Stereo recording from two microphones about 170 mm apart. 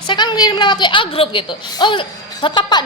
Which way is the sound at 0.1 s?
25° left (ahead or behind).